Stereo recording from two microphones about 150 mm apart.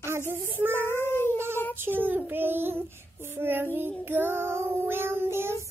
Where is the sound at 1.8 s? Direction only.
15° right (ahead or behind).